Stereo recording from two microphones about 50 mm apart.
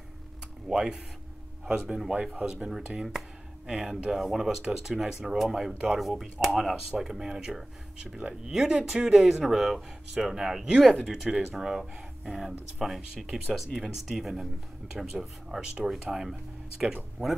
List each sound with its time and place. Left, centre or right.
0.7 s speech: centre
2.9 s speech: centre
11.1 s speech: centre
11.5 s speech: centre